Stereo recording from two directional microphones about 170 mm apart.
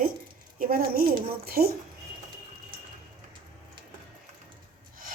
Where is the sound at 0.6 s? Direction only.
60° right (ahead or behind).